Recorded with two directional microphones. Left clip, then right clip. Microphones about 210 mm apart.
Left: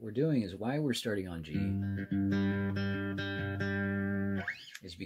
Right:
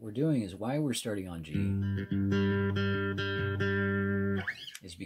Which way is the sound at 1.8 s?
50° right (ahead or behind).